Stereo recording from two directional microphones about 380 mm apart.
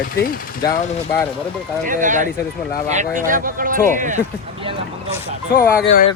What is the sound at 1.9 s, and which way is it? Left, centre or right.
Speech, centre.